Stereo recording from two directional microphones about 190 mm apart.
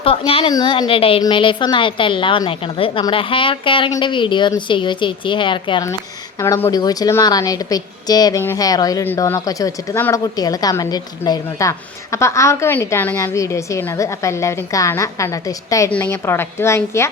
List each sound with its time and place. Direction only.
0.0 s a woman's voice: 30° left (ahead or behind); by 17.1 s 15° left (ahead or behind)